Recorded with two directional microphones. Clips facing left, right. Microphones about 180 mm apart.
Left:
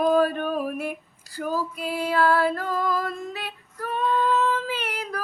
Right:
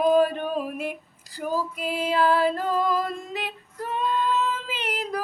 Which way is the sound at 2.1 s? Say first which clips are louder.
Even; 20° right (ahead or behind).